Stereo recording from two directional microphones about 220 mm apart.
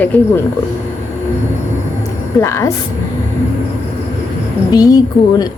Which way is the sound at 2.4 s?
15° left (ahead or behind).